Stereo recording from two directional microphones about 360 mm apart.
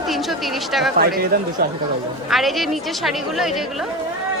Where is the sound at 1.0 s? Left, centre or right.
Right.